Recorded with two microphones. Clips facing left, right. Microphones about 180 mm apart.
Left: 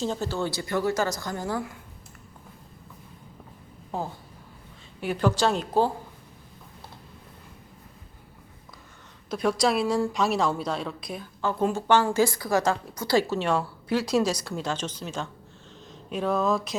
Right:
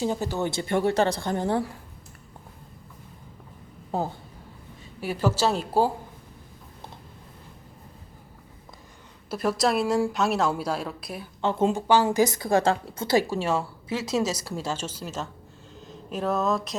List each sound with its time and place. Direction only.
0.0 s a woman's voice: 15° right (ahead or behind)
4.9 s a woman's voice: 5° right (ahead or behind)
9.3 s a woman's voice: 5° right (ahead or behind)
11.3 s a woman's voice: 25° right (ahead or behind)
11.9 s a woman's voice: 15° right (ahead or behind)